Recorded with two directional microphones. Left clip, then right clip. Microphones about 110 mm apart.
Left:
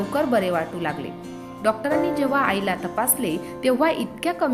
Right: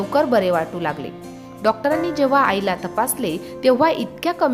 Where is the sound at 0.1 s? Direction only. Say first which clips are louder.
Right 5 dB; 50° right (ahead or behind).